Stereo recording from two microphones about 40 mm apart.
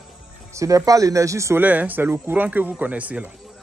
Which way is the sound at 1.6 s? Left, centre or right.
Right.